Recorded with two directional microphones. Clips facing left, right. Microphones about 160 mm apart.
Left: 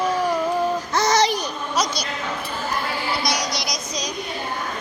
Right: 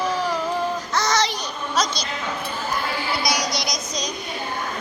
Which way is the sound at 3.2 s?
Centre (ahead or behind).